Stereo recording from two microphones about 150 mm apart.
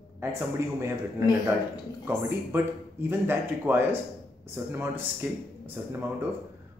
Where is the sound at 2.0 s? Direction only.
15° right (ahead or behind).